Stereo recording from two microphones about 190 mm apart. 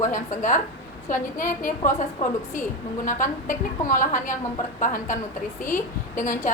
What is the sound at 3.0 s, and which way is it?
A woman's voice, 45° left (ahead or behind).